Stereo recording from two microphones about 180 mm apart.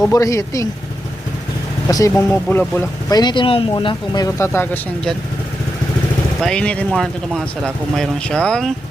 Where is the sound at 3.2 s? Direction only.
25° left (ahead or behind).